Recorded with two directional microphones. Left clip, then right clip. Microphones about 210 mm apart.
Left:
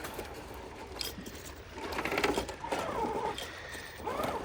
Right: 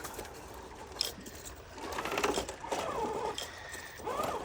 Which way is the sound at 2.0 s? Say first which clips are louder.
Left 2 dB; 15° right (ahead or behind).